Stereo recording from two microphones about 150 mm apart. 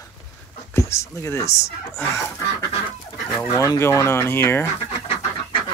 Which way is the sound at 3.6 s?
20° left (ahead or behind).